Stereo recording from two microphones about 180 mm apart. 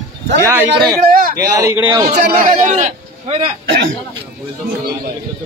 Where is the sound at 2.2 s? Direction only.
60° right (ahead or behind).